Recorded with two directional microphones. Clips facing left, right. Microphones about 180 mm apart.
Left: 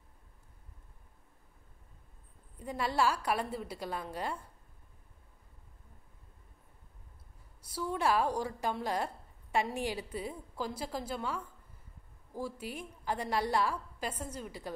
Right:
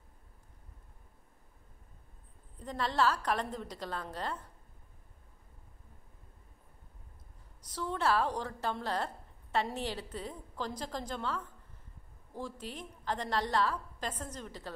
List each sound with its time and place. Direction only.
2.5 s a woman's voice: 10° left (ahead or behind)
7.6 s a woman's voice: 10° left (ahead or behind)